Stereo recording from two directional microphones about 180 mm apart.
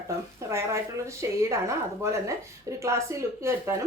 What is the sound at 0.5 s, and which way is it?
Speech, 15° right (ahead or behind).